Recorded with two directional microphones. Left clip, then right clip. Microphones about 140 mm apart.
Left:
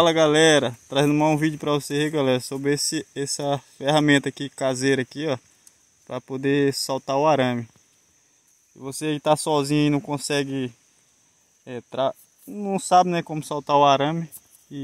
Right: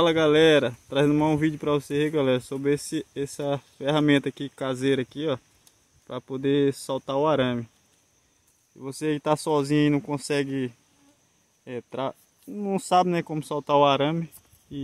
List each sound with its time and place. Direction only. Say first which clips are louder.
0.0 s speech: left 2 dB; 40° left (ahead or behind)
8.7 s speech: left 1 dB; 35° left (ahead or behind)